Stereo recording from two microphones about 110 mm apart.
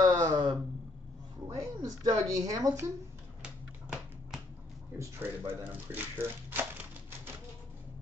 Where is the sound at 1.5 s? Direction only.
35° right (ahead or behind).